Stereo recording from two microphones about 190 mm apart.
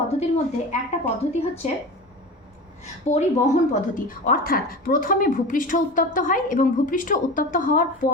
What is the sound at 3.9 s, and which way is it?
A woman's voice, 50° left (ahead or behind).